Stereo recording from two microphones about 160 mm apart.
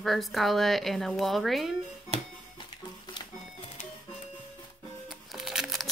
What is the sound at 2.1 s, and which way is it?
Music, 45° right (ahead or behind).